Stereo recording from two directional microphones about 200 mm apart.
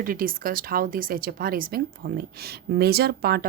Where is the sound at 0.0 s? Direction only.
45° right (ahead or behind).